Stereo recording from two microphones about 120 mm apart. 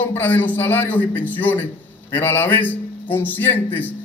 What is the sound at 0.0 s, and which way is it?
A man's voice, 15° left (ahead or behind).